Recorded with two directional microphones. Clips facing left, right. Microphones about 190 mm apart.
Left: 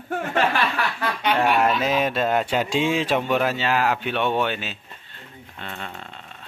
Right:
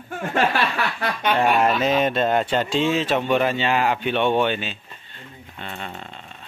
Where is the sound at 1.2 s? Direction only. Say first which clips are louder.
Right 1 dB; 5° left (ahead or behind).